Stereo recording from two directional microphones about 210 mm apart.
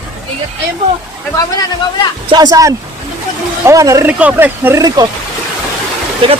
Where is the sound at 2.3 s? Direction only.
20° right (ahead or behind).